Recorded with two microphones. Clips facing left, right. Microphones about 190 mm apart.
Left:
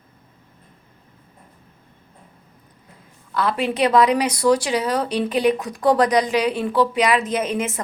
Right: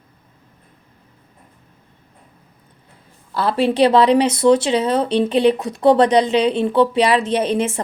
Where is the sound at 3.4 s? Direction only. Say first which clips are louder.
Right 5 dB; 30° right (ahead or behind).